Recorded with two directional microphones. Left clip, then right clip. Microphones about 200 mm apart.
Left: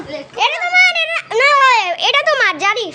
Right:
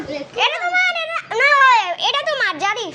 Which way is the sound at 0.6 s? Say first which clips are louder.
Left 6 dB; 35° left (ahead or behind).